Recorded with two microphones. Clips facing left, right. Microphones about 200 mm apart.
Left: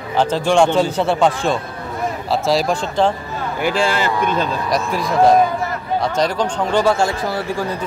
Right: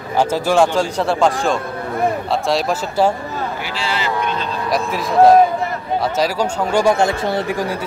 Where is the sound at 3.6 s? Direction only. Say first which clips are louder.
Left 5 dB; 50° left (ahead or behind).